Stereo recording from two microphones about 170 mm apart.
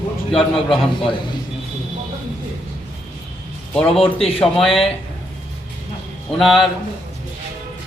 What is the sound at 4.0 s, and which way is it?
Speech, 35° left (ahead or behind).